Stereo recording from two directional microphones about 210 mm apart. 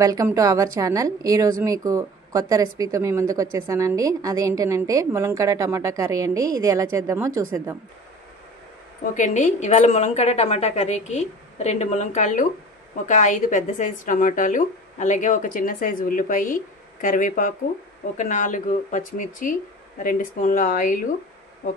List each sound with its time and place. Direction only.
0.0 s a woman's voice: 15° right (ahead or behind)
9.1 s speech: 35° left (ahead or behind)